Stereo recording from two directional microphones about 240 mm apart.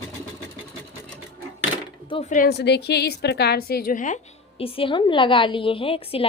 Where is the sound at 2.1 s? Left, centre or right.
Left.